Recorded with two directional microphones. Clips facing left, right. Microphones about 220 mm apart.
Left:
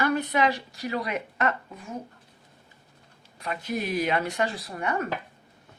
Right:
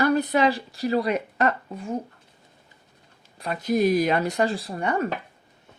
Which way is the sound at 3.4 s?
40° right (ahead or behind).